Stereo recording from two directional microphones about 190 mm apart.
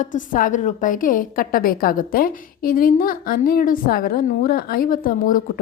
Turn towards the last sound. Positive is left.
turn(degrees=45)  # may be behind; listen again after turning